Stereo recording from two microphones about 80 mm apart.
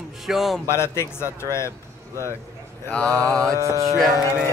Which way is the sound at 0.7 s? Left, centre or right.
Left.